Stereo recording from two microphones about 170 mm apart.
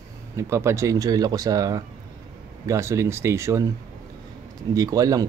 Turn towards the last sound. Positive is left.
turn(degrees=-20)  # may be behind; listen again after turning